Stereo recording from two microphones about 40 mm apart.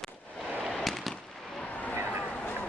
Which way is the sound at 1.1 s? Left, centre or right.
Left.